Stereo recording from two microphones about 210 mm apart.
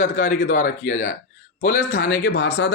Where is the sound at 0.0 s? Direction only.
45° left (ahead or behind).